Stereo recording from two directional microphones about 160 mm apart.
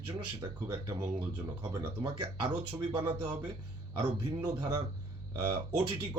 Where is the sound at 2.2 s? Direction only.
30° right (ahead or behind).